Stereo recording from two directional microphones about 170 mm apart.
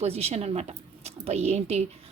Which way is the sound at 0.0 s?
35° right (ahead or behind).